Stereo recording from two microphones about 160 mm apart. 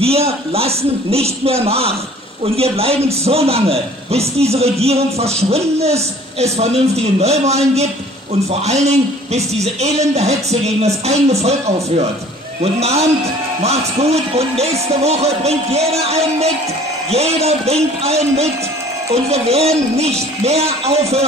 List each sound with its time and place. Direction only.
0.0 s a man's voice: 40° right (ahead or behind)